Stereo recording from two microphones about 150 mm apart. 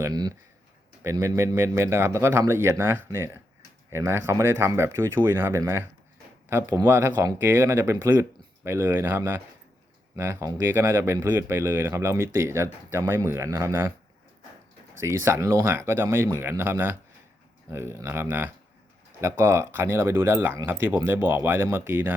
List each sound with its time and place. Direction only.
0.0 s speech: 25° right (ahead or behind)
15.0 s speech: 20° right (ahead or behind)